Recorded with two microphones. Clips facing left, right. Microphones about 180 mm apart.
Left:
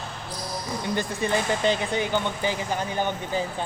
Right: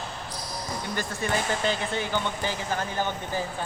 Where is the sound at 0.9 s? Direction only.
20° left (ahead or behind).